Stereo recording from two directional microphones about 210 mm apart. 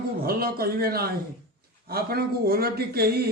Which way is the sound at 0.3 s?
45° right (ahead or behind).